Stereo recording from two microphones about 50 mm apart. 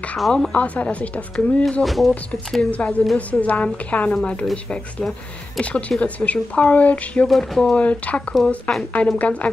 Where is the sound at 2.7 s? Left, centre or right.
Left.